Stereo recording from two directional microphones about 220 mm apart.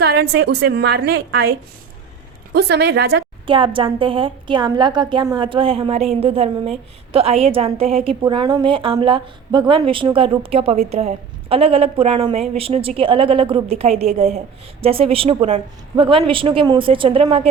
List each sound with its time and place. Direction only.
0.0 s a woman's voice: 50° right (ahead or behind)
2.5 s a woman's voice: 50° right (ahead or behind)
3.4 s a woman's voice: 25° right (ahead or behind)